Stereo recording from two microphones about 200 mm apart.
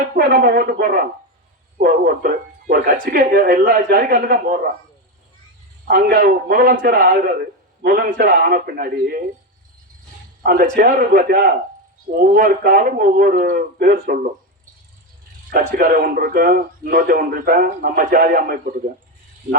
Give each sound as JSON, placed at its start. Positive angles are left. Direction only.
{"t": 0.2, "sound": "a man's voice", "side_deg": -50}
{"t": 5.9, "sound": "a man's voice", "side_deg": -50}
{"t": 10.4, "sound": "a man's voice", "side_deg": -45}
{"t": 15.4, "sound": "a man's voice", "side_deg": -45}